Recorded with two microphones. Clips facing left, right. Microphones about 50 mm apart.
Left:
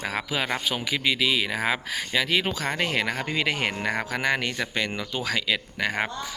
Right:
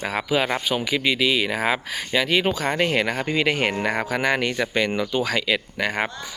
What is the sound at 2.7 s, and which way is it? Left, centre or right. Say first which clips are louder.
Speech: right 4 dB; right.